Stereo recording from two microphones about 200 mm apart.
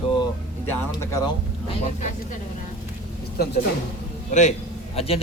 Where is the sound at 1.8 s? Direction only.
35° left (ahead or behind).